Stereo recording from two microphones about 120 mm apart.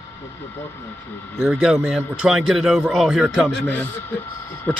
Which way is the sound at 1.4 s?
5° right (ahead or behind).